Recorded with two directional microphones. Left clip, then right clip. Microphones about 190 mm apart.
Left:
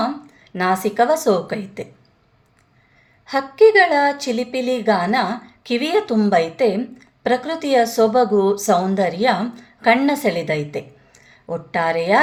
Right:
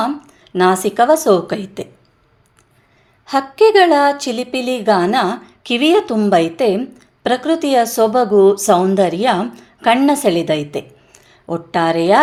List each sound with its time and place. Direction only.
0.0 s a woman's voice: 30° right (ahead or behind)
3.2 s a woman's voice: 35° right (ahead or behind)